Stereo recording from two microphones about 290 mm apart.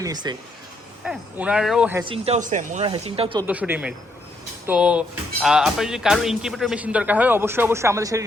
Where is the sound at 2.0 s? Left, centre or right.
Centre.